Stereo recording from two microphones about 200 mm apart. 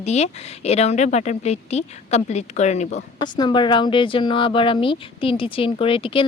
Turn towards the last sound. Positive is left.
turn(degrees=25)  # may be behind; listen again after turning